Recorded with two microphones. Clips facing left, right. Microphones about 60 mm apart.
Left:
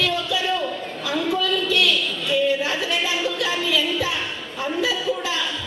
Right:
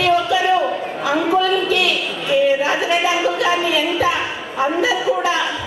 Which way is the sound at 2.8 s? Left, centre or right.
Centre.